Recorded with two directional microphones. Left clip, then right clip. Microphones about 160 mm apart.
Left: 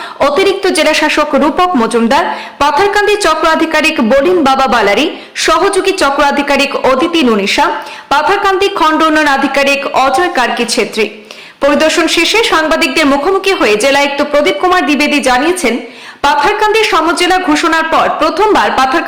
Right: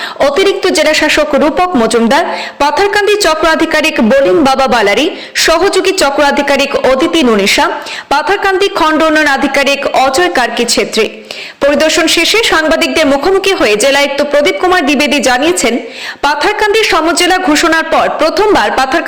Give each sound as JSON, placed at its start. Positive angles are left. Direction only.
{"t": 0.2, "sound": "a woman's voice", "side_deg": -15}